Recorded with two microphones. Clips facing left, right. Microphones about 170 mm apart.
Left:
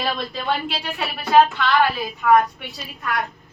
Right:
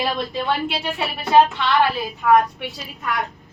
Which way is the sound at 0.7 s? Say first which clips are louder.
Right 2 dB; 25° right (ahead or behind).